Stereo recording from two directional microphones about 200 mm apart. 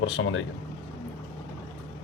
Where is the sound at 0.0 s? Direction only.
70° left (ahead or behind).